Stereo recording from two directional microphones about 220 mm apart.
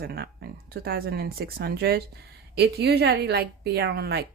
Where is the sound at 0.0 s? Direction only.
45° right (ahead or behind).